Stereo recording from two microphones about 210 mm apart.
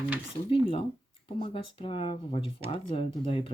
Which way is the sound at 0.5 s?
25° left (ahead or behind).